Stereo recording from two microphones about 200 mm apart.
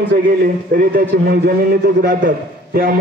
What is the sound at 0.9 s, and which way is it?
A man's voice, 50° right (ahead or behind).